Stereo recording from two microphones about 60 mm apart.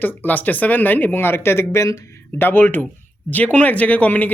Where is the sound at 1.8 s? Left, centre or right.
Left.